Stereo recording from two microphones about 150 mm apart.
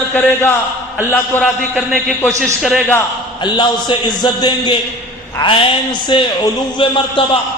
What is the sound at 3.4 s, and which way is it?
A man's voice, 30° left (ahead or behind).